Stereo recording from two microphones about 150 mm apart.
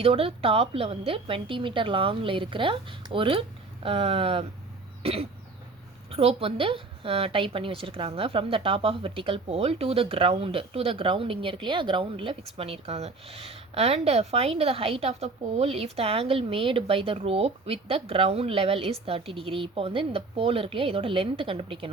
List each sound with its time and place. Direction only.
0.0 s a woman's voice: 40° right (ahead or behind)